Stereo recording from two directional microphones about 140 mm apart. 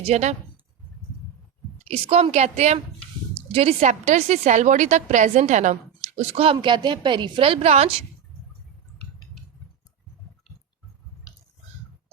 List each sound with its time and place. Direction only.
0.0 s a woman's voice: 55° right (ahead or behind)
2.0 s a woman's voice: 45° right (ahead or behind)
6.1 s a woman's voice: 40° right (ahead or behind)